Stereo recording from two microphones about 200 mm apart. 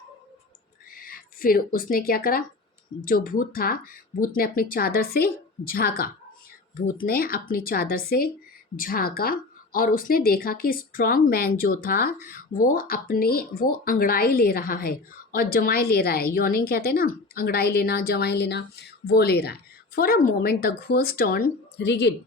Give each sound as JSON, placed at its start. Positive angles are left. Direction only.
{"t": 0.9, "sound": "a woman's voice", "side_deg": 45}